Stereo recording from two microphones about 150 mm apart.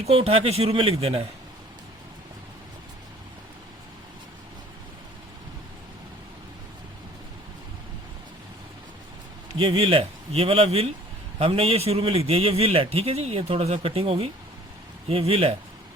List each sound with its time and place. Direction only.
0.0 s a man's voice: 40° right (ahead or behind)
9.6 s a man's voice: 35° right (ahead or behind)